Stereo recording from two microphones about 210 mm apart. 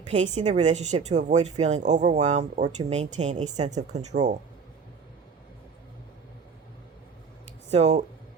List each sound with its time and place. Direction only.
0.1 s speech: 35° right (ahead or behind)
7.7 s speech: 30° right (ahead or behind)